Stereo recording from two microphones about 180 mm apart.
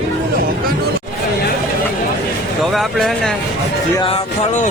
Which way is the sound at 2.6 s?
Centre (ahead or behind).